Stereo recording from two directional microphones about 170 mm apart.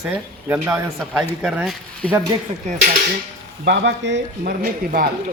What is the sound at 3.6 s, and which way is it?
Speech, 90° right.